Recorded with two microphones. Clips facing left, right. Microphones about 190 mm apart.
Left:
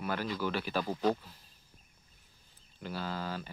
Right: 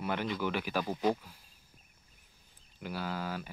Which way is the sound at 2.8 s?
10° right (ahead or behind).